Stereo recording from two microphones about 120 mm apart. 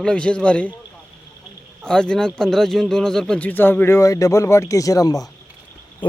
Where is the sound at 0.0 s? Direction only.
10° left (ahead or behind).